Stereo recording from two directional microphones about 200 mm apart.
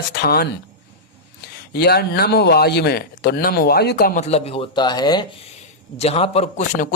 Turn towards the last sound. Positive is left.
turn(degrees=35)  # may be behind; listen again after turning